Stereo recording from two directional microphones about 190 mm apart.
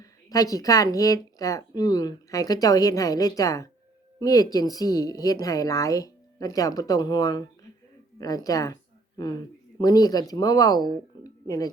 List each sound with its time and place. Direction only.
0.0 s a woman's voice: 20° left (ahead or behind)